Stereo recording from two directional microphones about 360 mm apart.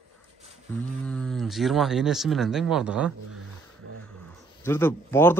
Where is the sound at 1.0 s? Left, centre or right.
Centre.